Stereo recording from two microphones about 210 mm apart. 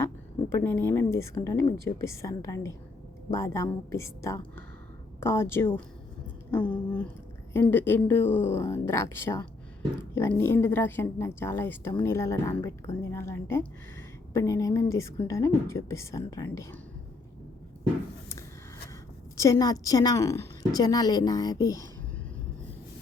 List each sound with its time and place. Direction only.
0.5 s a woman's voice: 10° left (ahead or behind)
6.5 s a sound: 5° left (ahead or behind)
7.5 s a woman's voice: 10° left (ahead or behind)
19.4 s a woman's voice: 15° left (ahead or behind)